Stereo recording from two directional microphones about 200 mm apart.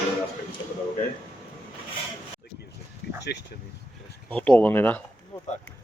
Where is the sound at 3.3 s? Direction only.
55° left (ahead or behind).